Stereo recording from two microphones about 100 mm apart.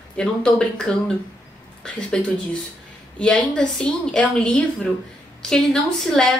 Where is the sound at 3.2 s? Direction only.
10° left (ahead or behind).